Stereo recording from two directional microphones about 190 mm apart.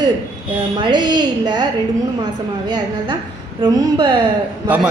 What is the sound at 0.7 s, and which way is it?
Speech, 25° right (ahead or behind).